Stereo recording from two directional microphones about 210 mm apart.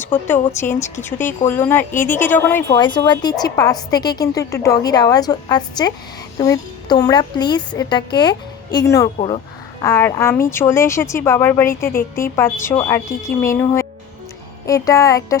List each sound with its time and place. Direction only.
0.4 s a woman's voice: 10° left (ahead or behind)
2.7 s a woman's voice: 20° left (ahead or behind)
9.1 s a woman's voice: 30° left (ahead or behind)
9.8 s a woman's voice: 15° left (ahead or behind)